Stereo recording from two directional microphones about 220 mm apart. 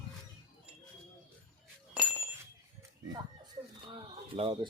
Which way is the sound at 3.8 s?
25° right (ahead or behind).